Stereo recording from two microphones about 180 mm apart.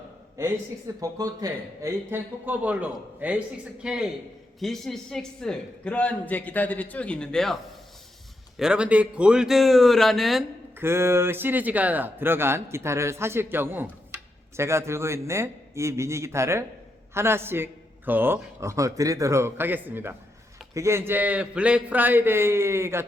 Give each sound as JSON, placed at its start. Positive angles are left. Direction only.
{"t": 1.0, "sound": "a man's voice", "side_deg": -20}
{"t": 10.8, "sound": "speech", "side_deg": -15}